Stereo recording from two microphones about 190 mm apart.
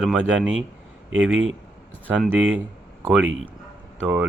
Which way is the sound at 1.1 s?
90° right.